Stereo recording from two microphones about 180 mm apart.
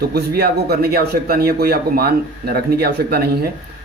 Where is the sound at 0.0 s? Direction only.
60° right (ahead or behind).